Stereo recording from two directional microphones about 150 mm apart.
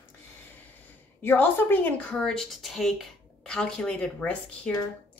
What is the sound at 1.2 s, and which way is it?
A woman's voice, 15° left (ahead or behind).